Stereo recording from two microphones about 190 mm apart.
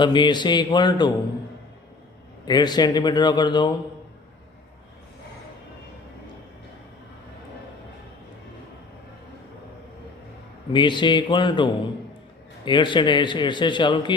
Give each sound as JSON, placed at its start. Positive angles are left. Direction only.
{"t": 0.0, "sound": "a man's voice", "side_deg": 25}
{"t": 2.5, "sound": "a man's voice", "side_deg": 20}
{"t": 10.7, "sound": "a man's voice", "side_deg": 25}